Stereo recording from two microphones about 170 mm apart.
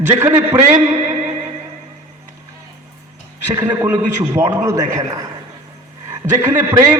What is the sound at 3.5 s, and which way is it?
A man's voice, 15° right (ahead or behind).